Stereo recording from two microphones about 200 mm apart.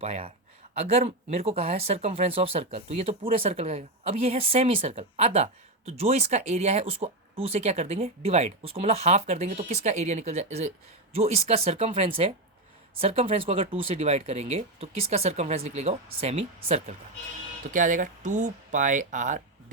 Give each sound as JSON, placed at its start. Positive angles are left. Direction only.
{"t": 0.0, "sound": "a woman's voice", "side_deg": -30}